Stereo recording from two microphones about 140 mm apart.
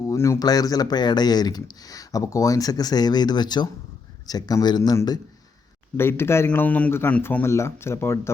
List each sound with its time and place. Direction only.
0.0 s speech: 20° left (ahead or behind)
6.0 s a man's voice: 15° left (ahead or behind)